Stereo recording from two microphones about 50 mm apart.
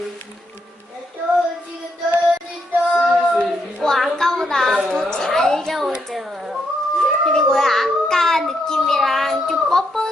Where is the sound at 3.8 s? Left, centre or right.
Centre.